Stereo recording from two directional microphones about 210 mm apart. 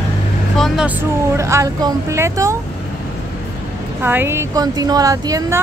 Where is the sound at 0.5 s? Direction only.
Centre (ahead or behind).